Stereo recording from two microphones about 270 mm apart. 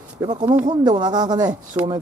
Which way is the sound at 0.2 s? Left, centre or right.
Centre.